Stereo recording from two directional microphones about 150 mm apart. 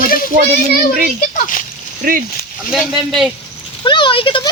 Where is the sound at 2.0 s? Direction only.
70° right (ahead or behind).